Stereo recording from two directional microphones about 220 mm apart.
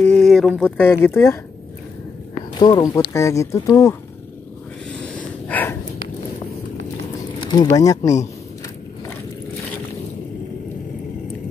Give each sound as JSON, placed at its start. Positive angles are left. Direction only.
{"t": 0.0, "sound": "speech", "side_deg": 5}
{"t": 2.6, "sound": "speech", "side_deg": 20}
{"t": 4.9, "sound": "snort", "side_deg": 5}
{"t": 7.2, "sound": "speech", "side_deg": 20}